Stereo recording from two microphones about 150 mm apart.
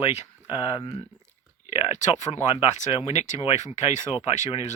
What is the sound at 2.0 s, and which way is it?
Speech, 50° left (ahead or behind).